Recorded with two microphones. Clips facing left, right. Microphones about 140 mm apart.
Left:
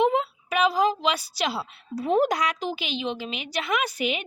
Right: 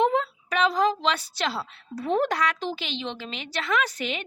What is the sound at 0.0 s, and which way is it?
A woman's voice, 10° left (ahead or behind).